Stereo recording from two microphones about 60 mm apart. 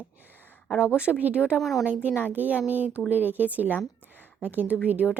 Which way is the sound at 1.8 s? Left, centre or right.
Right.